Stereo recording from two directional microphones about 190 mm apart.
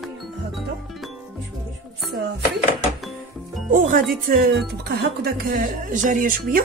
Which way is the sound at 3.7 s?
45° right (ahead or behind).